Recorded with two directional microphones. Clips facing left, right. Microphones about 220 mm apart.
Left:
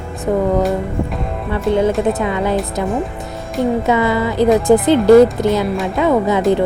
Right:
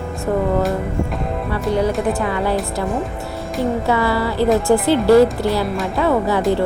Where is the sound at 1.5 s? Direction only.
25° left (ahead or behind).